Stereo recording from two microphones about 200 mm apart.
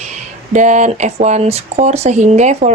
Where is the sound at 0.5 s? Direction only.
35° right (ahead or behind).